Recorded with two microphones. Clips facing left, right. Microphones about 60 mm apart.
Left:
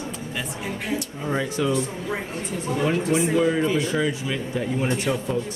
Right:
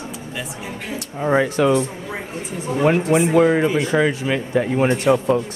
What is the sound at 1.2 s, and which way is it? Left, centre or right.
Speech, right.